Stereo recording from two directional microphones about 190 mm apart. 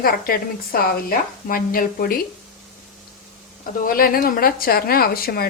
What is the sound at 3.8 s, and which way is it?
A woman's voice, 50° left (ahead or behind).